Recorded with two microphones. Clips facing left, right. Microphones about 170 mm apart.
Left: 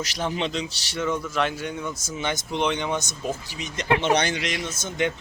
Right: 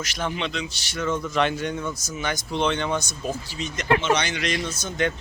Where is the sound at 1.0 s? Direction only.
10° left (ahead or behind).